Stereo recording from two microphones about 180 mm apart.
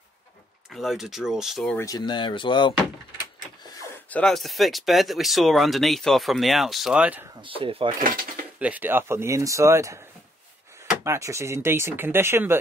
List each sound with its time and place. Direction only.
0.7 s speech: centre (ahead or behind)
1.8 s speech: 20° left (ahead or behind)
4.1 s speech: 5° left (ahead or behind)
7.4 s speech: 30° right (ahead or behind)
8.5 s speech: 10° right (ahead or behind)